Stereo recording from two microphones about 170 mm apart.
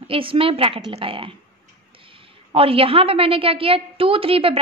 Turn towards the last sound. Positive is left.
turn(degrees=-35)  # may be behind; listen again after turning